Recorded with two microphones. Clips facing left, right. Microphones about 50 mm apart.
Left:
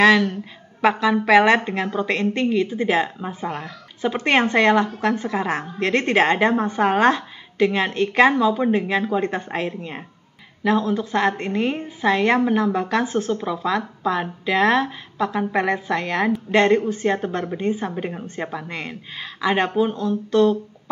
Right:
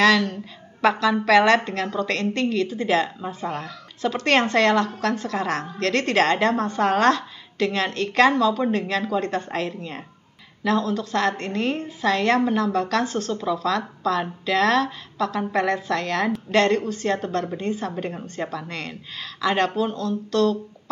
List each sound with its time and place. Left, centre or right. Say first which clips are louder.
0.0 s a woman's voice: left 3 dB; centre